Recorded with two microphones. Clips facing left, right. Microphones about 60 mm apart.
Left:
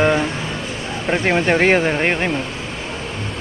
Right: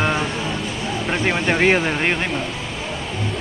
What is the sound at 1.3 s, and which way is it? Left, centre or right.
Speech, centre.